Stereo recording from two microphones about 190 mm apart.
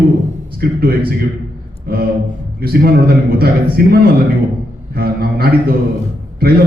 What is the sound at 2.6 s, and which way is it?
A man's voice, 55° right (ahead or behind).